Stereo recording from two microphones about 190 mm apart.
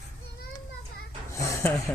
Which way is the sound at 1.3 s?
15° left (ahead or behind).